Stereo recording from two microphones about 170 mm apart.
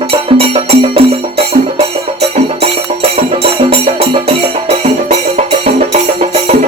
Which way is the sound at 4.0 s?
35° right (ahead or behind).